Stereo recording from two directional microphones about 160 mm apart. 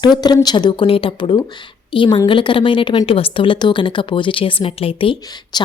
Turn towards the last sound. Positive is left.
turn(degrees=30)  # may be behind; listen again after turning